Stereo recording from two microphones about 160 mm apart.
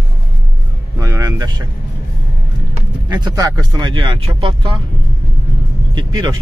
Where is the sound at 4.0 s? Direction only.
35° right (ahead or behind).